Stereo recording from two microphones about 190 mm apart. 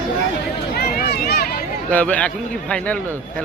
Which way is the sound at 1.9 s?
5° left (ahead or behind).